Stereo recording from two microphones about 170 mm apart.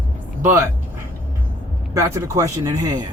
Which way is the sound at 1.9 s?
20° right (ahead or behind).